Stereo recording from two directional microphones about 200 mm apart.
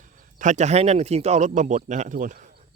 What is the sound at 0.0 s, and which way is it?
Speech, 40° right (ahead or behind).